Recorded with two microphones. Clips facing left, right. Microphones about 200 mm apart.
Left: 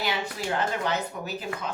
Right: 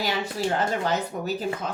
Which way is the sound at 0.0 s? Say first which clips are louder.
Right 3 dB; 40° right (ahead or behind).